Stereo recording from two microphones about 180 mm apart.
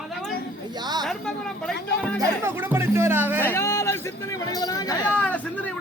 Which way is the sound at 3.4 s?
15° left (ahead or behind).